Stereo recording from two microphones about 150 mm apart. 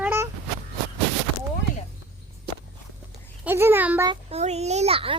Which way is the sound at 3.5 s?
15° right (ahead or behind).